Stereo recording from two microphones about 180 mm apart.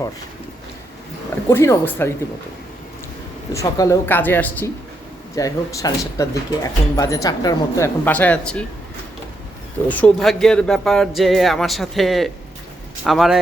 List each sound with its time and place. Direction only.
1.5 s a woman's voice: 15° left (ahead or behind)
3.5 s a woman's voice: 15° left (ahead or behind)
8.0 s a woman's voice: 10° left (ahead or behind)
9.9 s speech: 5° left (ahead or behind)